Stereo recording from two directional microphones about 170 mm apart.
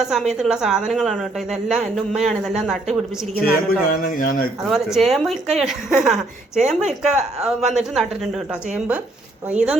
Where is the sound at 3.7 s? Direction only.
55° left (ahead or behind).